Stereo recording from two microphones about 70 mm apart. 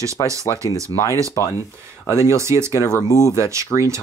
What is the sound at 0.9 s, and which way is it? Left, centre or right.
Speech, left.